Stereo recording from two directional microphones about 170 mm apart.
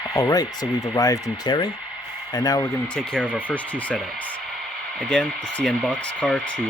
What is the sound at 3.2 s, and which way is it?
Speech, 10° right (ahead or behind).